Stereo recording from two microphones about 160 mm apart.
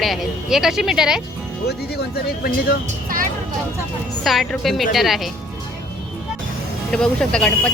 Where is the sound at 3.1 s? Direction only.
60° right (ahead or behind).